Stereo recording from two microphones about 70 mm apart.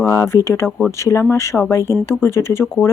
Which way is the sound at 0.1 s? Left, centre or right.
Left.